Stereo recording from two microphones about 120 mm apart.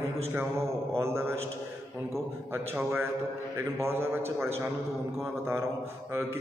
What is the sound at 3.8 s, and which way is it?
Speech, 20° right (ahead or behind).